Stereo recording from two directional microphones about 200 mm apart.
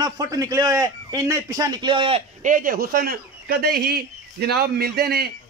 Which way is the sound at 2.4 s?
45° right (ahead or behind).